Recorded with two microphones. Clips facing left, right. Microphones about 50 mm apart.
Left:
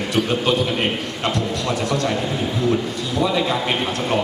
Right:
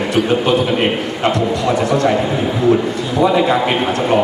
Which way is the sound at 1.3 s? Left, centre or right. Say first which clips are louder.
Right 7 dB; centre.